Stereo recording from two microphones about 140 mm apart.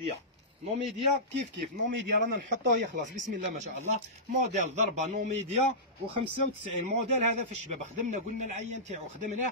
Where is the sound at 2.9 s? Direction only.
65° right (ahead or behind).